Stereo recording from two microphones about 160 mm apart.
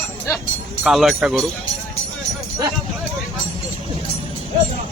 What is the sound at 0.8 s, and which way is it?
Speech, centre (ahead or behind).